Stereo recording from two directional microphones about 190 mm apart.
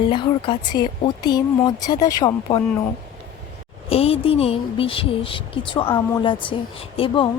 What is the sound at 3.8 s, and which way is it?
Speech, 30° left (ahead or behind).